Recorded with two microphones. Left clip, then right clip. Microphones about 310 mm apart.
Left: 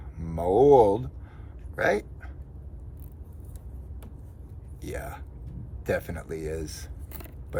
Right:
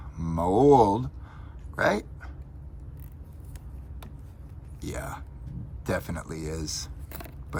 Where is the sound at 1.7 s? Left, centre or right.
Centre.